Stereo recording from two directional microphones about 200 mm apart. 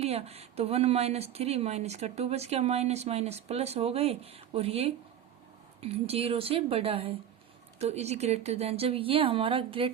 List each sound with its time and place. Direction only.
0.0 s speech: 30° right (ahead or behind)